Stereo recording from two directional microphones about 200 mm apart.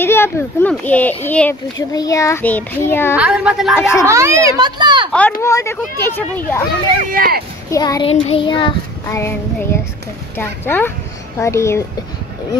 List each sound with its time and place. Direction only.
0.0 s speech: 10° left (ahead or behind)
3.2 s a woman's voice: 5° right (ahead or behind)
3.7 s speech: 15° left (ahead or behind)
4.0 s a child's voice: 15° right (ahead or behind)
5.4 s speech: 15° left (ahead or behind)
7.1 s speech: 45° right (ahead or behind)
7.7 s child singing: 20° left (ahead or behind)
10.3 s speech: 10° left (ahead or behind)